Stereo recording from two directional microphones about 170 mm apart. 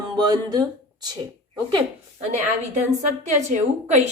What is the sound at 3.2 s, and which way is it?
Speech, 45° right (ahead or behind).